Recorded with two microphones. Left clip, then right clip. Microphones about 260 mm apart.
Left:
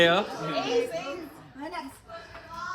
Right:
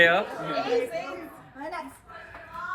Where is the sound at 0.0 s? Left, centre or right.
Centre.